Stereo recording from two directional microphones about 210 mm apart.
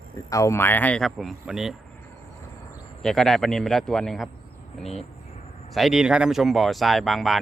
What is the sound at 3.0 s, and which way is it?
Speech, centre (ahead or behind).